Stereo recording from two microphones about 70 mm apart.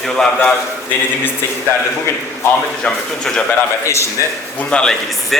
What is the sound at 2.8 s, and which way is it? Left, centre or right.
Speech, centre.